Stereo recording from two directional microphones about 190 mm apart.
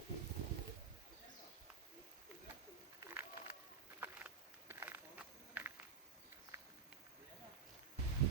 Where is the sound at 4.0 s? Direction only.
10° right (ahead or behind).